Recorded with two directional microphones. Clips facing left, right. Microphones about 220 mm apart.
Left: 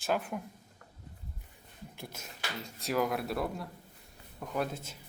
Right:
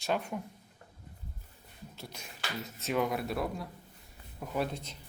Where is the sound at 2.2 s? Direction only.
Centre (ahead or behind).